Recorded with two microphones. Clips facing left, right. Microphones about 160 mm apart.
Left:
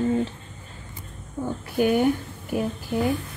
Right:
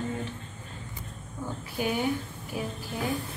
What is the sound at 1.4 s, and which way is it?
Speech, 60° left (ahead or behind).